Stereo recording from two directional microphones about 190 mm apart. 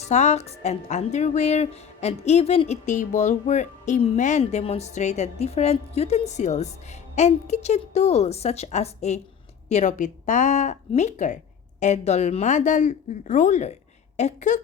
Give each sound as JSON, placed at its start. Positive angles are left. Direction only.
{"t": 0.0, "sound": "speech", "side_deg": 35}